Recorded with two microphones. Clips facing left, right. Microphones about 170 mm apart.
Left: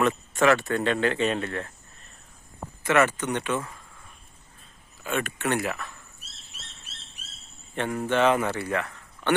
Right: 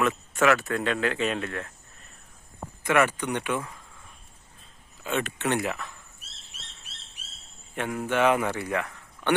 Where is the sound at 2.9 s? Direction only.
15° right (ahead or behind).